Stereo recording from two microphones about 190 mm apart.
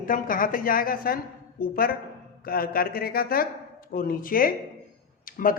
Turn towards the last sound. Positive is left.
turn(degrees=45)  # may be behind; listen again after turning